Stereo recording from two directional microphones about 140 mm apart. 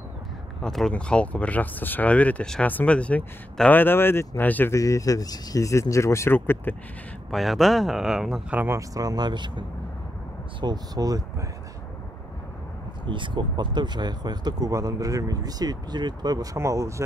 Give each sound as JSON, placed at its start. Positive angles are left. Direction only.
{"t": 0.6, "sound": "speech", "side_deg": 5}
{"t": 7.2, "sound": "speech", "side_deg": 0}
{"t": 13.0, "sound": "speech", "side_deg": -35}